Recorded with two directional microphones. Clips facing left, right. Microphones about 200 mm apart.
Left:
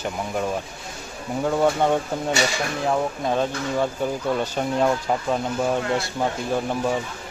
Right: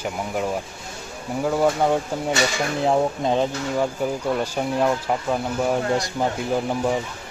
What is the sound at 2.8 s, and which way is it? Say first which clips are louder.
Dishes: right 3 dB; 25° right (ahead or behind).